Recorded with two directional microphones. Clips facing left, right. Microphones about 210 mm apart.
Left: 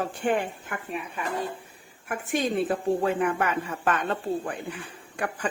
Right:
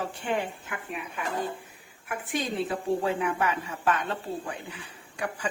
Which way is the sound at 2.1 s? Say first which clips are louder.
Left 4 dB; 45° left (ahead or behind).